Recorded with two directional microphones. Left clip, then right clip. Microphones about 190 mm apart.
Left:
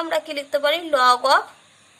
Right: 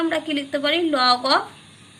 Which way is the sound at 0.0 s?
40° left (ahead or behind).